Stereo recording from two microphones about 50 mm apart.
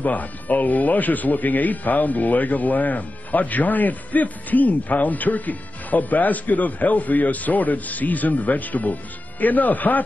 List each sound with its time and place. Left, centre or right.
0.0 s speech: left